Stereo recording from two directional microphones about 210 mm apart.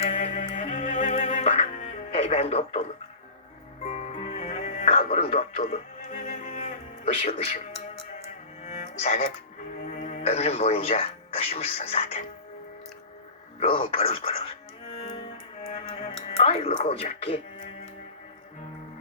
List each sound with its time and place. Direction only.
0.0 s music: 30° left (ahead or behind)
3.8 s music: 30° left (ahead or behind)
8.6 s music: 35° left (ahead or behind)
9.8 s speech: 35° left (ahead or behind)
13.6 s speech: 25° left (ahead or behind)
14.9 s music: 25° left (ahead or behind)
15.7 s speech: 25° left (ahead or behind)